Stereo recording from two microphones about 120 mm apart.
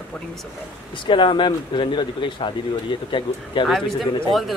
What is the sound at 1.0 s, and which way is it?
Speech, 45° left (ahead or behind).